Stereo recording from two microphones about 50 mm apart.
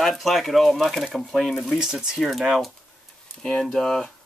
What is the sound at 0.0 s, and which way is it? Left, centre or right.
Speech, centre.